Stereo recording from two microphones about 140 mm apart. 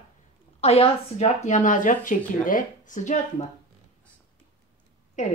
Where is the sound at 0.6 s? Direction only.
50° left (ahead or behind).